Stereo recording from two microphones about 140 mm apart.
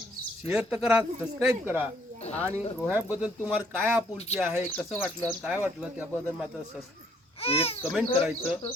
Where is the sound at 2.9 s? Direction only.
15° right (ahead or behind).